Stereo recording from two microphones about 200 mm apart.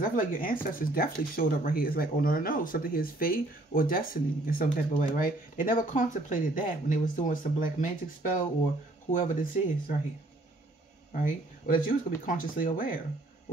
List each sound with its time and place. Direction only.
0.0 s speech: 45° left (ahead or behind)
9.1 s speech: 40° left (ahead or behind)
11.1 s speech: 45° left (ahead or behind)